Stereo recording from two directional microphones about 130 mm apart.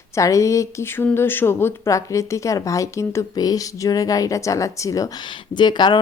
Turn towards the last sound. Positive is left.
turn(degrees=35)  # may be behind; listen again after turning